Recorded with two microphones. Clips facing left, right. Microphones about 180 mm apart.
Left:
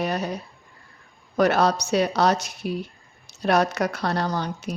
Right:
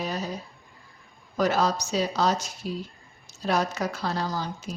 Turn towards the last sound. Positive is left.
turn(degrees=70)  # may be behind; listen again after turning